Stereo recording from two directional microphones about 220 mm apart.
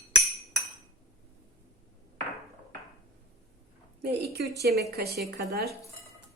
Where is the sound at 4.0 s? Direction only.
50° right (ahead or behind).